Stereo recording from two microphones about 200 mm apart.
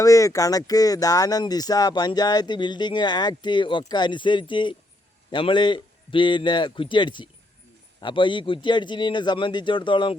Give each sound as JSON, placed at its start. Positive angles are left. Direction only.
{"t": 0.0, "sound": "speech", "side_deg": 15}